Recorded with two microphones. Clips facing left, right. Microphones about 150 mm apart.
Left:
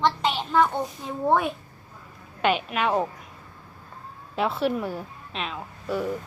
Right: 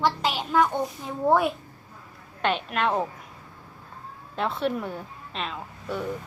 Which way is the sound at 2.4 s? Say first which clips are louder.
Left 2 dB; 5° left (ahead or behind).